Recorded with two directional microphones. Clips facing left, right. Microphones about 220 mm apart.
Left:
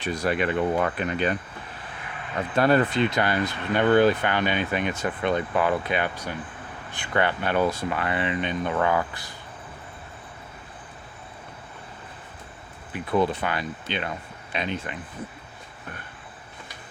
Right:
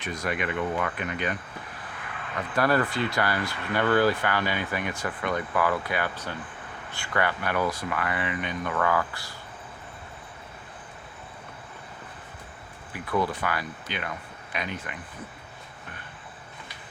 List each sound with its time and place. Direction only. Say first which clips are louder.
0.0 s speech: left 5 dB; 30° left (ahead or behind)
12.9 s speech: left 4 dB; 25° left (ahead or behind)